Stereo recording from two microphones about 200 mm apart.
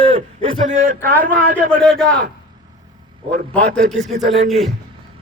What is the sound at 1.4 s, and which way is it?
Speech, 40° right (ahead or behind).